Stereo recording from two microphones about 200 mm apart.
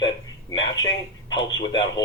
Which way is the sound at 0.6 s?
20° left (ahead or behind).